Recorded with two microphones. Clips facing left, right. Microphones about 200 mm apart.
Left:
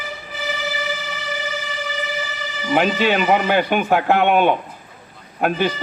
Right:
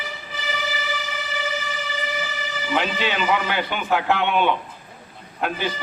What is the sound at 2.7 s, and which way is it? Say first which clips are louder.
Speech: left 7 dB; 45° left (ahead or behind).